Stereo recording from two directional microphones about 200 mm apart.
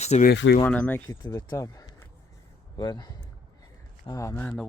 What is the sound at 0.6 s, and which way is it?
A man's voice, 5° left (ahead or behind).